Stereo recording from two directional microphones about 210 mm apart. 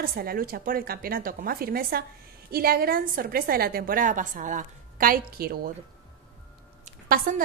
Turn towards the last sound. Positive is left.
turn(degrees=-40)  # may be behind; listen again after turning